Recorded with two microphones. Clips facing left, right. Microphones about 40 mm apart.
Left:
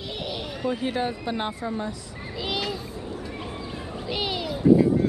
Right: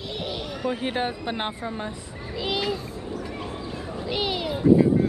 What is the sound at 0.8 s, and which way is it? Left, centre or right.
Speech, right.